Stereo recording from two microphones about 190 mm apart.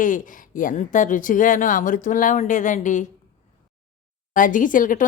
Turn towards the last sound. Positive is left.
turn(degrees=45)  # may be behind; listen again after turning